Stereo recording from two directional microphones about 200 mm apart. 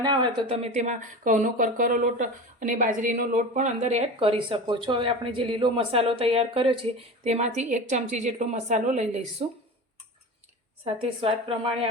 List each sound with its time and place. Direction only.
0.0 s a woman's voice: 20° right (ahead or behind)
11.0 s a woman's voice: 25° right (ahead or behind)